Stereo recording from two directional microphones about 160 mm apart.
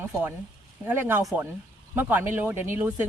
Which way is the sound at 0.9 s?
15° right (ahead or behind).